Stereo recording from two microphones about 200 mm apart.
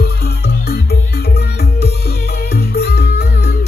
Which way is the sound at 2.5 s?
50° left (ahead or behind).